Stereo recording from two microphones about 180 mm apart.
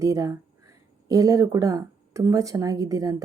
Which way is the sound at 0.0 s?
20° right (ahead or behind).